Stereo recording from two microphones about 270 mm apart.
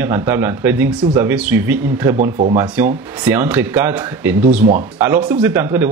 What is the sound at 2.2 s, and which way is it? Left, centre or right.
Speech, right.